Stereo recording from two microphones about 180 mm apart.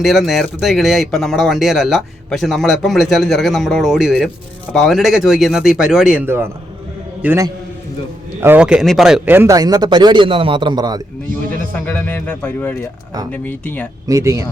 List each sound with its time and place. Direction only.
0.0 s a man's voice: centre (ahead or behind); by 11.0 s 25° right (ahead or behind)
11.9 s speech: 10° left (ahead or behind)
14.1 s speech: 15° right (ahead or behind)